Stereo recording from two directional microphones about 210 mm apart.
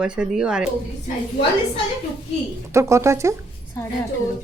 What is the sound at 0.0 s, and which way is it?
Speech, 5° right (ahead or behind).